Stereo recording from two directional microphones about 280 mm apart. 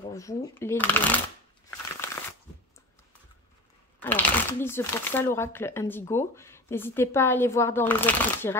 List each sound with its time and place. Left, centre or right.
0.1 s speech: centre
4.0 s speech: centre